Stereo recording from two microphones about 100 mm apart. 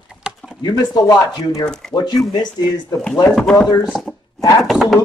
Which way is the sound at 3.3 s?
5° left (ahead or behind).